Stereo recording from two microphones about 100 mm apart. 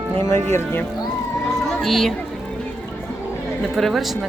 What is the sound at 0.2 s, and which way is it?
Speech, 25° left (ahead or behind).